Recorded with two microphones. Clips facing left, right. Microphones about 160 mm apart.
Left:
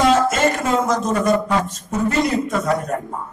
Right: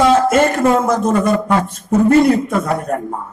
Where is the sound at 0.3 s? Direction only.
55° right (ahead or behind).